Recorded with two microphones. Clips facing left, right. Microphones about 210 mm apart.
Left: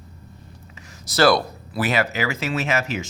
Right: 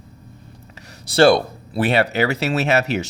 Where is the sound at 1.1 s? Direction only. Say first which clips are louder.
Right 4 dB; 30° right (ahead or behind).